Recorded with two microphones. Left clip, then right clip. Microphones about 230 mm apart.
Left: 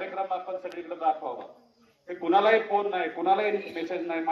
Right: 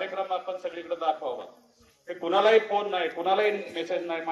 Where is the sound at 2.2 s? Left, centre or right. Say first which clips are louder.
Right 1 dB; right.